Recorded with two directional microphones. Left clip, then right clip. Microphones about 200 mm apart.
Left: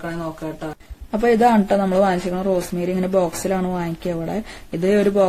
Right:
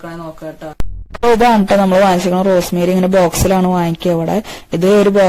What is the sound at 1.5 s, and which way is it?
Speech, 40° right (ahead or behind).